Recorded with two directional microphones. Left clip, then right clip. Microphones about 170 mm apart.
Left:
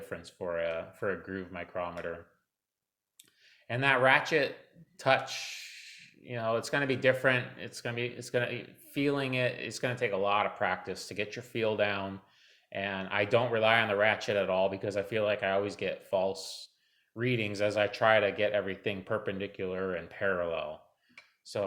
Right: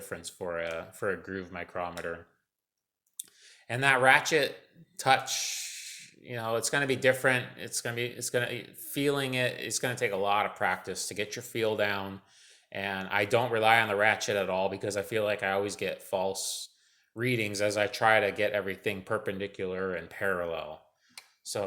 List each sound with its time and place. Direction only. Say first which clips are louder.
0.0 s speech: right 1 dB; 25° right (ahead or behind)
3.2 s speech: right 9 dB; 30° right (ahead or behind)